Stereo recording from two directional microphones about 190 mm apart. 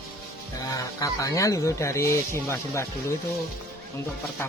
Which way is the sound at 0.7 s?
15° left (ahead or behind).